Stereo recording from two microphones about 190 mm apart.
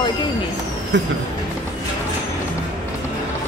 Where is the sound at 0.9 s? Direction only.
75° right (ahead or behind).